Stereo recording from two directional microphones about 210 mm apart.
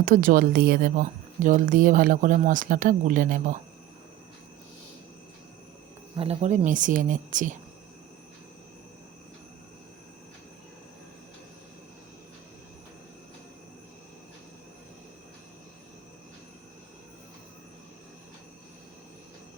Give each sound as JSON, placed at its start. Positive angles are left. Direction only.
{"t": 0.0, "sound": "speech", "side_deg": -40}
{"t": 6.1, "sound": "speech", "side_deg": -30}